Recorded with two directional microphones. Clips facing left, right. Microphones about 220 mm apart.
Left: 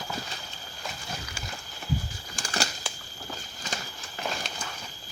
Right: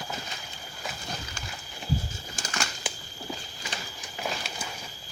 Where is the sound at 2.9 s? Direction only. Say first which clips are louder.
Right 3 dB; 15° right (ahead or behind).